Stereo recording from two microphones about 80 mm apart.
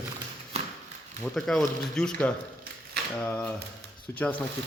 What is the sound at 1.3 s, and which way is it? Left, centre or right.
Speech, centre.